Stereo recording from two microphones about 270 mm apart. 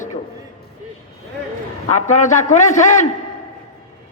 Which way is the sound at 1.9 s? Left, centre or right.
Left.